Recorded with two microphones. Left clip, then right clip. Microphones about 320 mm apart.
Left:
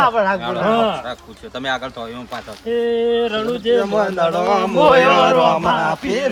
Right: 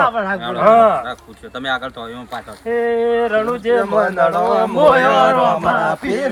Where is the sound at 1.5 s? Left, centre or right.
Centre.